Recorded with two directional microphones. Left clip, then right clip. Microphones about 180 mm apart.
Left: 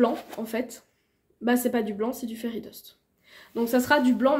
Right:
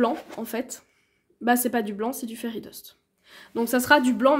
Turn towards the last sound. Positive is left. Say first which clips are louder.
# right 3 dB
turn(degrees=-35)  # may be behind; listen again after turning